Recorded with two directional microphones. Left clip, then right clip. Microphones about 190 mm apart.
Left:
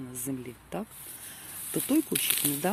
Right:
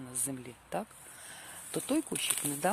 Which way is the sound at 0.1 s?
5° right (ahead or behind).